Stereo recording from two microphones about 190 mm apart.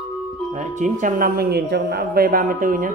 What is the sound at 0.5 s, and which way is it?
Speech, 40° right (ahead or behind).